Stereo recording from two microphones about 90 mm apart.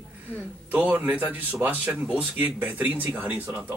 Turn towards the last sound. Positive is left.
turn(degrees=-15)  # may be behind; listen again after turning